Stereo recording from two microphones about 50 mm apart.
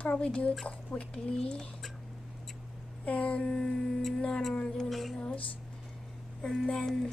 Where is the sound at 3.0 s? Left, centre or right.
Left.